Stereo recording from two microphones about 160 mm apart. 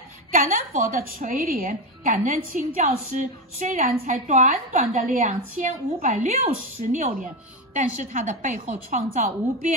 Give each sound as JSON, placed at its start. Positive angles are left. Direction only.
{"t": 0.3, "sound": "a woman's voice", "side_deg": -55}